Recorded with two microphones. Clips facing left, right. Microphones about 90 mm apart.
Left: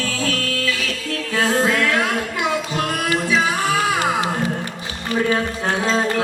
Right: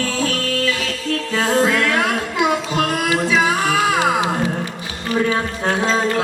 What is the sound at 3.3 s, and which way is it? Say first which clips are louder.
Humming: right 2 dB; 20° right (ahead or behind).